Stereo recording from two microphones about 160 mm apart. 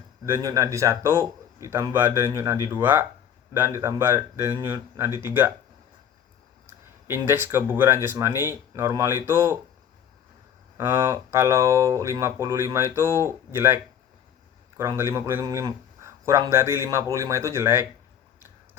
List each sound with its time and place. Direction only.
0.3 s speech: 20° right (ahead or behind)
7.1 s speech: 15° right (ahead or behind)
10.8 s speech: 15° right (ahead or behind)
14.8 s speech: 15° right (ahead or behind)